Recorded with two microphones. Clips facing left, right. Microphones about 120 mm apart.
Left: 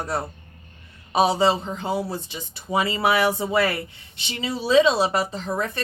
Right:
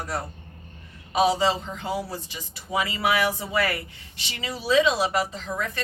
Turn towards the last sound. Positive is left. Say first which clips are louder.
# left 4 dB
turn(degrees=30)  # may be behind; listen again after turning